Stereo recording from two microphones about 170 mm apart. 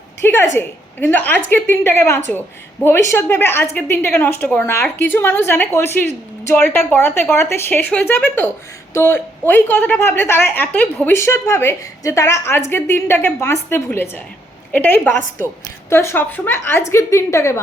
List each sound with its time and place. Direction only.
0.5 s a woman's voice: 10° left (ahead or behind)